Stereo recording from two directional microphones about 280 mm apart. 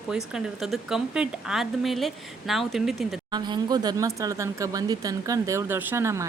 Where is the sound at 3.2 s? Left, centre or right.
Centre.